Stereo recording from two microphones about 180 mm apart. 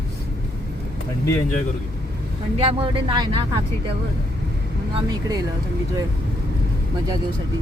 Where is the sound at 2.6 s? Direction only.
30° right (ahead or behind).